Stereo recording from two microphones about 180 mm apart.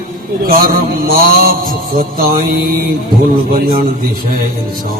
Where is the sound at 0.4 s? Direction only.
55° right (ahead or behind).